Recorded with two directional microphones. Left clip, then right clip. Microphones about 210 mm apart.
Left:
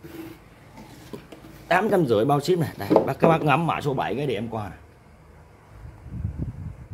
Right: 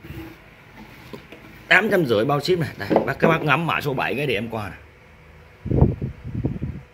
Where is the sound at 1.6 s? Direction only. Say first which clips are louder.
Right 4 dB; centre (ahead or behind).